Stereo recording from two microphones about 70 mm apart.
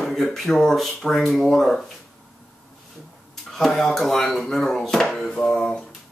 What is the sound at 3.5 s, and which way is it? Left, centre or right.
Speech, centre.